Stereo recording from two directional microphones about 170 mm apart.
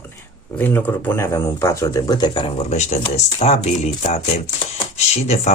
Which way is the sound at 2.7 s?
40° left (ahead or behind).